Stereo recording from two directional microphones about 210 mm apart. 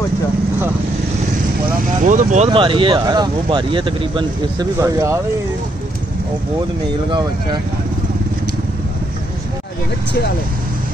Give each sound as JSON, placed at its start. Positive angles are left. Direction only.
{"t": 2.0, "sound": "speech", "side_deg": -35}